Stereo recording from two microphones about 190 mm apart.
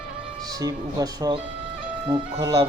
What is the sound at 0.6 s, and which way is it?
Speech, 20° right (ahead or behind).